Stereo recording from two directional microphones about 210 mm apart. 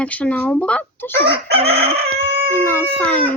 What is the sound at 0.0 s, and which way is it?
Speech, 5° left (ahead or behind).